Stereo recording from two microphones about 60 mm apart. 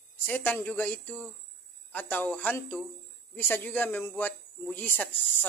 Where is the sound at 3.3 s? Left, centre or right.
Left.